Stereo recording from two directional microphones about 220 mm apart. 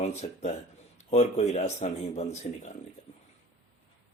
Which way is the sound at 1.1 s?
30° left (ahead or behind).